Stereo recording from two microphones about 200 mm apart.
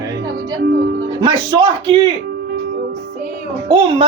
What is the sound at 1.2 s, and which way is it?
Speech, 20° right (ahead or behind).